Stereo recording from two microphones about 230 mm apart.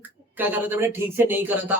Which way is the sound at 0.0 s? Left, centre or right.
Centre.